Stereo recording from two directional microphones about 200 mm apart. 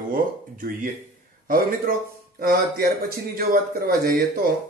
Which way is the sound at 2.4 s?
50° right (ahead or behind).